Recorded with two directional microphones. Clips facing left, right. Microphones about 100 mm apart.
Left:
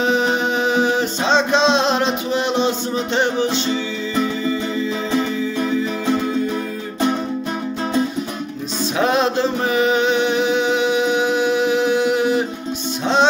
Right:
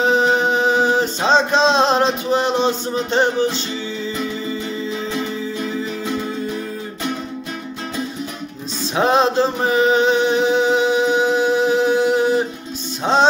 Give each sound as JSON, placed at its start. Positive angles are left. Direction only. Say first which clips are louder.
{"t": 0.0, "sound": "music", "louder": "right 2 dB", "side_deg": -35}
{"t": 8.9, "sound": "music", "louder": "right 2 dB", "side_deg": -30}